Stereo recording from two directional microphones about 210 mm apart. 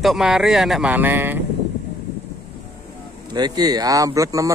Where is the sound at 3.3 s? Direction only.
20° right (ahead or behind).